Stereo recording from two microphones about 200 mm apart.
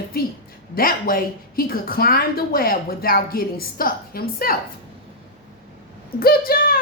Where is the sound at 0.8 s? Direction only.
45° left (ahead or behind).